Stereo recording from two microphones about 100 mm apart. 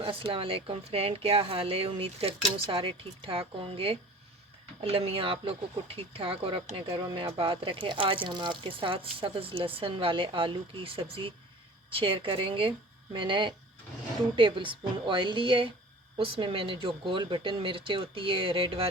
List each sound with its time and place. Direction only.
0.0 s a woman's voice: 60° right (ahead or behind)
7.0 s speech: 55° right (ahead or behind)